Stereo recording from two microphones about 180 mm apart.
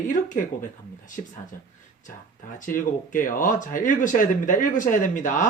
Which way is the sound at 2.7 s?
50° left (ahead or behind).